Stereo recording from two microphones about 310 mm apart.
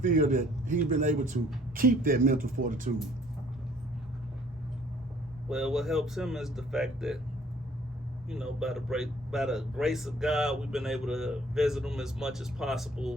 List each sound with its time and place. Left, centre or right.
0.0 s speech: right
5.5 s a man's voice: centre
8.3 s a man's voice: centre